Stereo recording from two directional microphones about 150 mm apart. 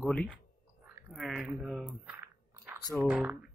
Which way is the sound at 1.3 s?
Centre (ahead or behind).